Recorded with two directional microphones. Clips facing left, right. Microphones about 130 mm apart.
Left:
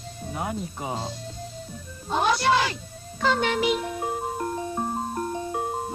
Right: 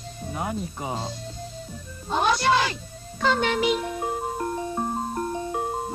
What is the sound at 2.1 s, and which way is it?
Speech, 5° left (ahead or behind).